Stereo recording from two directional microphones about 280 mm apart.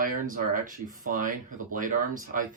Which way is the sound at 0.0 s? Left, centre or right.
Right.